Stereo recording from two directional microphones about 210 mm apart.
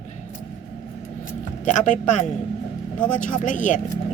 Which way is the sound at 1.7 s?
35° left (ahead or behind).